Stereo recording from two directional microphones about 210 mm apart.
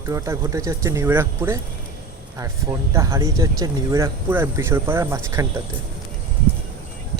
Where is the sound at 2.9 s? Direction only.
15° right (ahead or behind).